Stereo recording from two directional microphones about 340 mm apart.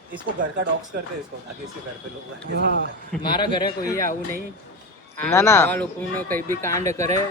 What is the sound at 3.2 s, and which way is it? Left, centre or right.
Speech, centre.